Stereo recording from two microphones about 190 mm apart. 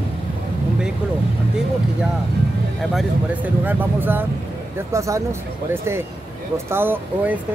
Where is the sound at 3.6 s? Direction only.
10° right (ahead or behind).